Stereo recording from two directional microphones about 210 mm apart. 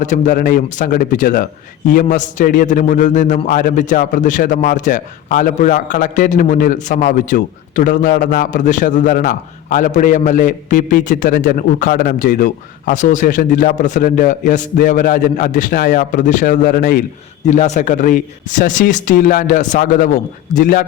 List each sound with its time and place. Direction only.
0.0 s a man's voice: 40° left (ahead or behind)
17.4 s a man's voice: 35° left (ahead or behind)